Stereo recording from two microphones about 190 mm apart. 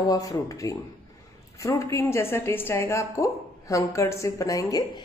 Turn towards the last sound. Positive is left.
turn(degrees=20)  # may be behind; listen again after turning